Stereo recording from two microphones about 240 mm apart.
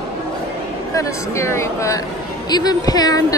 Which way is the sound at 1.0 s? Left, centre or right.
Centre.